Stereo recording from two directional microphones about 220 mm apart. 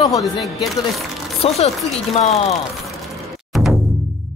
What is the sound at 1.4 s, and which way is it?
Speech, 30° left (ahead or behind).